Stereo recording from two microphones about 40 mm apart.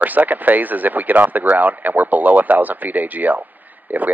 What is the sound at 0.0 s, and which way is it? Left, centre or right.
Speech, right.